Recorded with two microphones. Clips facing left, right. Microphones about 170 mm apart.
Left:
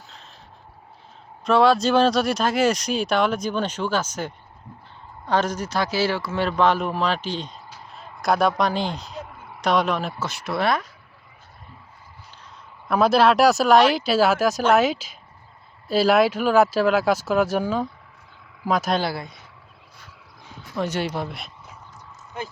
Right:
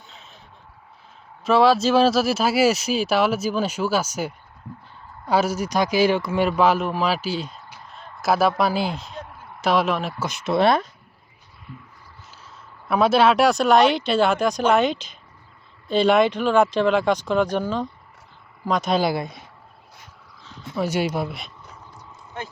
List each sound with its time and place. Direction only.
1.5 s a man's voice: centre (ahead or behind)
10.2 s speech: 20° right (ahead or behind)
12.9 s speech: centre (ahead or behind)
18.9 s speech: 20° right (ahead or behind)
20.7 s speech: 10° right (ahead or behind)